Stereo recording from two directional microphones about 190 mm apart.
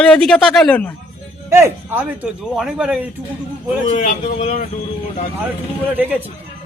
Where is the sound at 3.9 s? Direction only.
40° left (ahead or behind).